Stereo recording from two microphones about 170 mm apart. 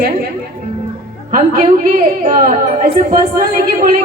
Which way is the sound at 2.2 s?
45° right (ahead or behind).